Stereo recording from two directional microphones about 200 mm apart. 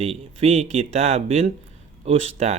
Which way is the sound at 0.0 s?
30° right (ahead or behind).